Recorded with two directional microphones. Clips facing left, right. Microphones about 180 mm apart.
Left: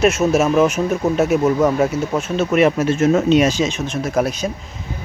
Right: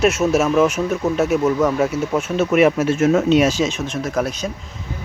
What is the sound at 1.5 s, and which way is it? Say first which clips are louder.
Speech: left 2 dB; 15° left (ahead or behind).